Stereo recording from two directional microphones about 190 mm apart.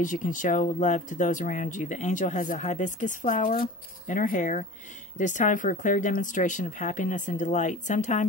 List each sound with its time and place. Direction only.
0.0 s speech: 45° left (ahead or behind)